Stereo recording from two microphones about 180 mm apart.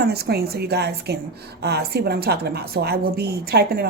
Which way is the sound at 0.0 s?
60° right (ahead or behind).